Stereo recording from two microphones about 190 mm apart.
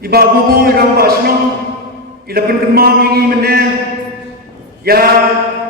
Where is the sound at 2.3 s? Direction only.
55° right (ahead or behind).